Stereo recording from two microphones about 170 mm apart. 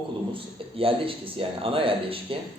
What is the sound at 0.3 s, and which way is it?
Speech, 30° right (ahead or behind).